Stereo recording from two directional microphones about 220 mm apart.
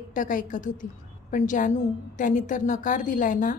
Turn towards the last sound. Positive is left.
turn(degrees=35)  # may be behind; listen again after turning